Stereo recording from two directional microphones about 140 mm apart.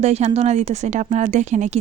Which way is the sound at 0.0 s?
55° right (ahead or behind).